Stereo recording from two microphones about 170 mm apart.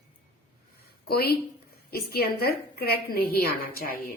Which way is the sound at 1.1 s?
65° left (ahead or behind).